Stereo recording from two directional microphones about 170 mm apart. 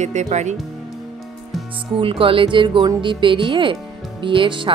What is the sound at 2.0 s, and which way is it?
Speech, 30° right (ahead or behind).